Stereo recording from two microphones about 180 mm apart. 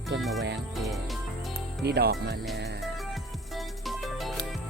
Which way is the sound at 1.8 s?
60° right (ahead or behind).